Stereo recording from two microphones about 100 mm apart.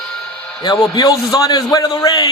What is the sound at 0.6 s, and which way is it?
A man's voice, 40° left (ahead or behind).